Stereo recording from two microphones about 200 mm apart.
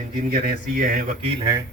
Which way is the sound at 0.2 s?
50° right (ahead or behind).